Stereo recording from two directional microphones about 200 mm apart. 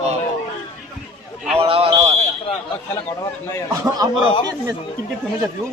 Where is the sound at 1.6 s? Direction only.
30° right (ahead or behind).